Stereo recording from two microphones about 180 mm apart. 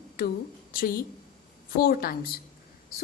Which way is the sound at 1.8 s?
55° left (ahead or behind).